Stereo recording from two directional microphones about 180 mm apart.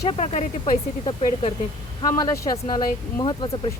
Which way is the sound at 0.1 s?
30° left (ahead or behind).